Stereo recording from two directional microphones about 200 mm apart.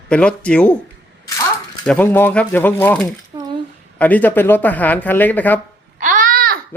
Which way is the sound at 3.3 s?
15° right (ahead or behind).